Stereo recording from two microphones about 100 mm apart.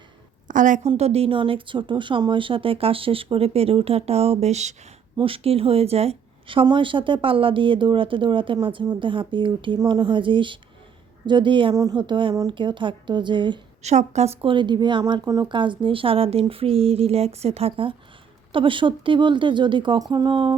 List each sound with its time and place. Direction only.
0.9 s speech: 90° right
5.1 s a woman's voice: 65° right (ahead or behind)
6.7 s speech: 55° right (ahead or behind)
11.7 s speech: 40° right (ahead or behind)
13.8 s a woman's voice: 90° right
14.5 s speech: 50° right (ahead or behind); by 17.9 s 70° right (ahead or behind)
18.5 s speech: 60° right (ahead or behind)